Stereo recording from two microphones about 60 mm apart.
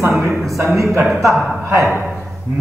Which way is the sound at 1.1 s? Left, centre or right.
Centre.